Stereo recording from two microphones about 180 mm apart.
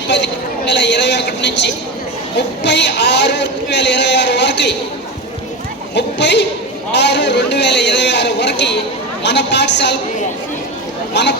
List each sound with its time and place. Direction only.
0.1 s a man's voice: 75° left (ahead or behind)
5.9 s a man's voice: 75° left (ahead or behind)
11.1 s speech: 75° left (ahead or behind)